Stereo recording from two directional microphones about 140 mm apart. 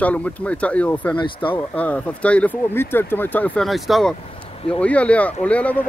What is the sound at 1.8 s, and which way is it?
Speech, 10° left (ahead or behind).